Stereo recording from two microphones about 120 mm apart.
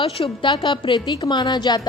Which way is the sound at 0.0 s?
40° left (ahead or behind).